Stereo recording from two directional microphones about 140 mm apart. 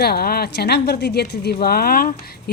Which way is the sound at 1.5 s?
90° left.